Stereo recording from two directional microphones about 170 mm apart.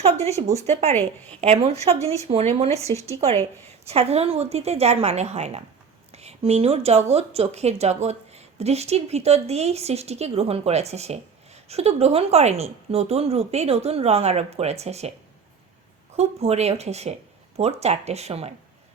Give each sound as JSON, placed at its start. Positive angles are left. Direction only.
{"t": 0.0, "sound": "speech", "side_deg": -40}
{"t": 0.9, "sound": "a woman's voice", "side_deg": 10}
{"t": 1.4, "sound": "speech", "side_deg": -35}
{"t": 16.1, "sound": "speech", "side_deg": -40}